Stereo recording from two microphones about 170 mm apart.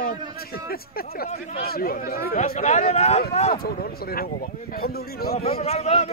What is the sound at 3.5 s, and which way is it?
A man's voice, 65° left (ahead or behind).